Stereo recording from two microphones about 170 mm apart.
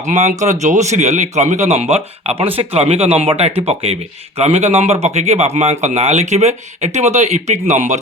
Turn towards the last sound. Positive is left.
turn(degrees=-45)  # may be behind; listen again after turning